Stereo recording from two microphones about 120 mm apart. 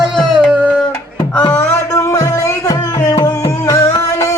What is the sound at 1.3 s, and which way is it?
Music, 15° left (ahead or behind).